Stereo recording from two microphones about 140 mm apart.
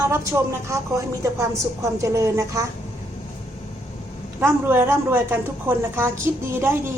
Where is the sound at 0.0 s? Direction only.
20° right (ahead or behind).